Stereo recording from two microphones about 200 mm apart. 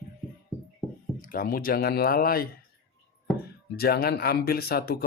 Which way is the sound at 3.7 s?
50° left (ahead or behind).